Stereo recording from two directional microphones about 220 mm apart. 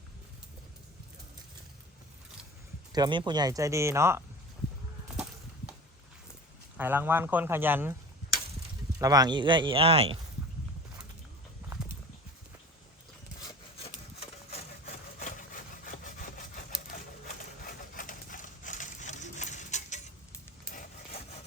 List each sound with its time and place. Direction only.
2.9 s speech: 20° right (ahead or behind)
6.7 s speech: 10° right (ahead or behind)
9.0 s speech: 15° right (ahead or behind)
13.4 s wood: 25° left (ahead or behind)
17.9 s a sound: 35° left (ahead or behind)